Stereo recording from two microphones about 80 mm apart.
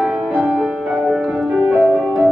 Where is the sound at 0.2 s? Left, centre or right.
Centre.